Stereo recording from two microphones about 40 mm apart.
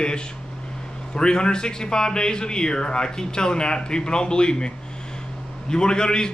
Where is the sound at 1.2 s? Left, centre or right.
Centre.